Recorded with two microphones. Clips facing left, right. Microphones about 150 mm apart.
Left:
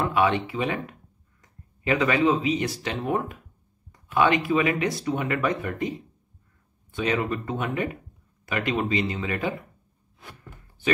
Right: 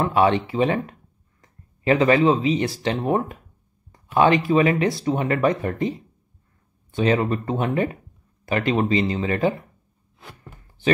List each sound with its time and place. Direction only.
0.0 s speech: 35° right (ahead or behind)
1.9 s speech: 35° right (ahead or behind)
7.0 s speech: 35° right (ahead or behind)